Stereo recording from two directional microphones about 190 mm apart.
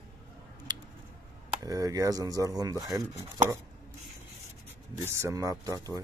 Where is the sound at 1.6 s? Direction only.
20° right (ahead or behind).